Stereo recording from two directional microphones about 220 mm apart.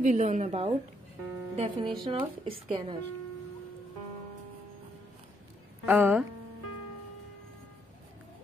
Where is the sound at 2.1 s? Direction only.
20° right (ahead or behind).